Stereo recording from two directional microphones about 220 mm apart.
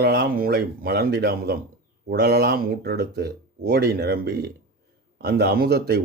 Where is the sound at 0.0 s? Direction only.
45° right (ahead or behind).